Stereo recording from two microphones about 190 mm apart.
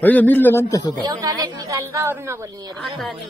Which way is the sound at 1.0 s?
20° right (ahead or behind).